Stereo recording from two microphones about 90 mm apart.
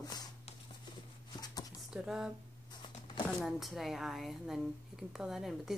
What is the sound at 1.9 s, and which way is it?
Speech, 10° right (ahead or behind).